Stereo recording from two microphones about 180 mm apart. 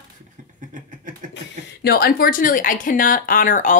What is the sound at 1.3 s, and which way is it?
Speech, 65° left (ahead or behind).